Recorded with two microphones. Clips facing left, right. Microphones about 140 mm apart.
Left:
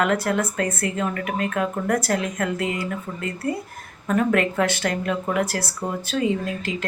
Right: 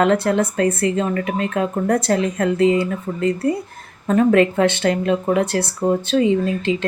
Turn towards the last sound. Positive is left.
turn(degrees=-25)  # may be behind; listen again after turning